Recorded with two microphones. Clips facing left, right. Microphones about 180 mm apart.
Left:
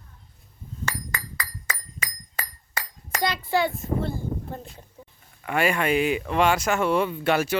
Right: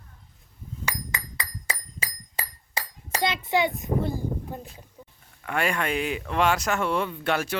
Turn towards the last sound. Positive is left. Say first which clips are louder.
# left 4 dB
turn(degrees=5)  # may be behind; listen again after turning